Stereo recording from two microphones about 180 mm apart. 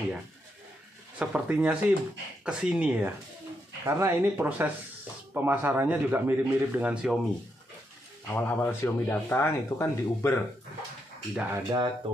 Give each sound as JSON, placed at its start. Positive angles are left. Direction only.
{"t": 1.2, "sound": "a man's voice", "side_deg": -5}
{"t": 8.3, "sound": "speech", "side_deg": 10}
{"t": 11.3, "sound": "a man's voice", "side_deg": -15}